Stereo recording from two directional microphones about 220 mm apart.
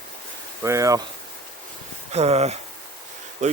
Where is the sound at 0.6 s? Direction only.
15° right (ahead or behind).